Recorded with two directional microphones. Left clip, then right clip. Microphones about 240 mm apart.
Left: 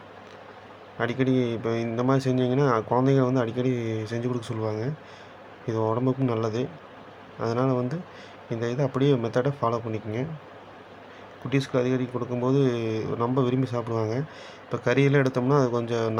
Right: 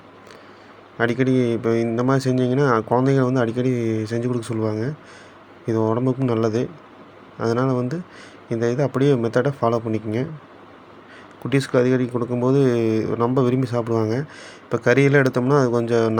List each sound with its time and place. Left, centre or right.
0.9 s a man's voice: centre
11.4 s a man's voice: centre